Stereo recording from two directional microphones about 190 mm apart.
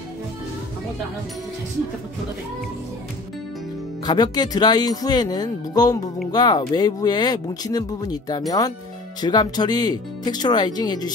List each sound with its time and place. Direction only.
4.0 s speech: 20° left (ahead or behind)